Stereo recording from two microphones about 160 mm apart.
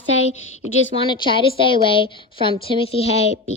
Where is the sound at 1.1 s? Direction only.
30° left (ahead or behind).